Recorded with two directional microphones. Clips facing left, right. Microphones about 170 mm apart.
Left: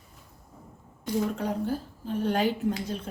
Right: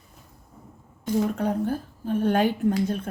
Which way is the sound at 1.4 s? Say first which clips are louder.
Right 4 dB; 55° right (ahead or behind).